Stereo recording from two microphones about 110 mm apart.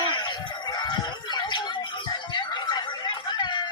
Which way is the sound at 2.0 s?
40° left (ahead or behind).